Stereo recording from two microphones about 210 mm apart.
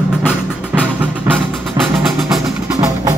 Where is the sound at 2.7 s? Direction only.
15° right (ahead or behind).